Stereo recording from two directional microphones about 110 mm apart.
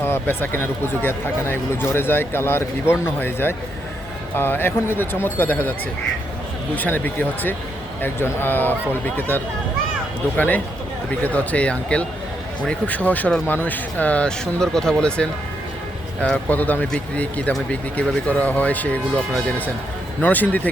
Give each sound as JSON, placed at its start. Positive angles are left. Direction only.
{"t": 0.0, "sound": "speech", "side_deg": 20}
{"t": 6.7, "sound": "speech", "side_deg": 15}